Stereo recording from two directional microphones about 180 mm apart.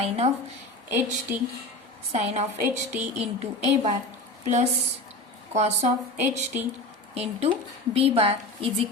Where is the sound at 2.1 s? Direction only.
35° right (ahead or behind).